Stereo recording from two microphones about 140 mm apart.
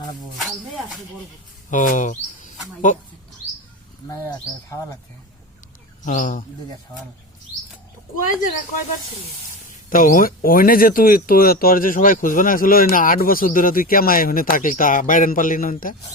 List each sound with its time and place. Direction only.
0.3 s speech: centre (ahead or behind)
1.7 s speech: 70° left (ahead or behind)
6.1 s speech: 65° left (ahead or behind)
8.1 s speech: 70° left (ahead or behind)
9.9 s speech: 80° left